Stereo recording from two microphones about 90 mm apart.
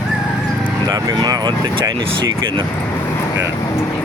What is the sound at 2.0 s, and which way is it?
Speech, 75° right (ahead or behind).